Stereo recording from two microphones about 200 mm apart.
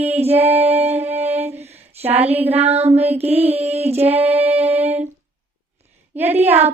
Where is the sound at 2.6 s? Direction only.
30° right (ahead or behind).